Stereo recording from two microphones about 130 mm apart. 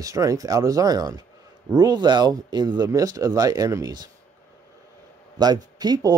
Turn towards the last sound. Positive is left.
turn(degrees=-30)  # may be behind; listen again after turning